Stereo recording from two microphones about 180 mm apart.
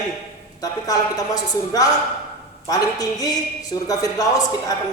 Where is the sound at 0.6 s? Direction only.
20° left (ahead or behind).